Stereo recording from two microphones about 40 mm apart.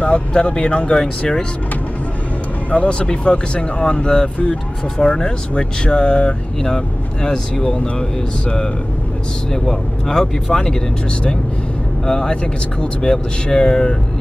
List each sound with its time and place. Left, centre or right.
0.0 s speech: left
2.7 s speech: left
9.5 s speech: centre
12.1 s speech: centre